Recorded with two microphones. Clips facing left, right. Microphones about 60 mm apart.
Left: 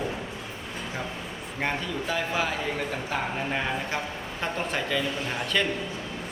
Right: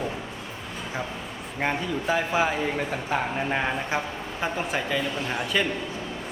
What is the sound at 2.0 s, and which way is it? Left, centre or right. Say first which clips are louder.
A man's voice: right 5 dB; centre.